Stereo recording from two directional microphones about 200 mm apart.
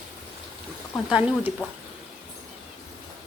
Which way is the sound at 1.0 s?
5° right (ahead or behind).